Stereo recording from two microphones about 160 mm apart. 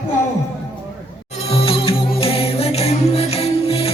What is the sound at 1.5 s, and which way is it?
Music, 35° left (ahead or behind).